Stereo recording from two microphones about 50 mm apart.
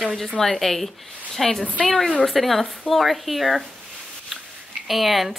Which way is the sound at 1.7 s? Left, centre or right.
Centre.